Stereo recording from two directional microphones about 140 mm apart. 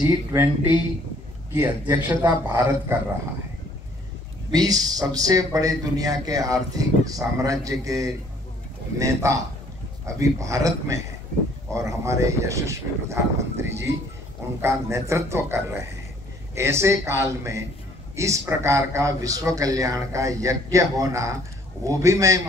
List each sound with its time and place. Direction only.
0.0 s a man's voice: 15° right (ahead or behind)
4.5 s a man's voice: 25° right (ahead or behind)